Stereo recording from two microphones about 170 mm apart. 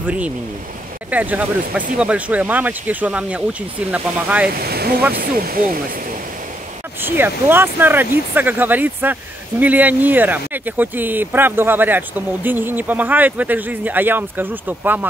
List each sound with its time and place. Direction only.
1.1 s speech: 10° right (ahead or behind)
4.6 s speech: 65° right (ahead or behind)
7.0 s speech: 10° right (ahead or behind)